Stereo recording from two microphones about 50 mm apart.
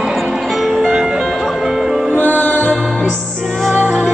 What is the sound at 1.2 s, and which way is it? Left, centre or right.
Music, centre.